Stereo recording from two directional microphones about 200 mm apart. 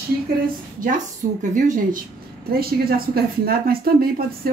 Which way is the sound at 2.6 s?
50° right (ahead or behind).